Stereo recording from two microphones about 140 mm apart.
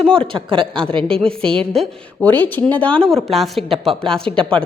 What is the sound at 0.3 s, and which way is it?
Speech, 40° right (ahead or behind).